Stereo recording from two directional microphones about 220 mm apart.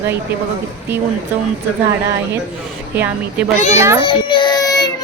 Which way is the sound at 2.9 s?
5° right (ahead or behind).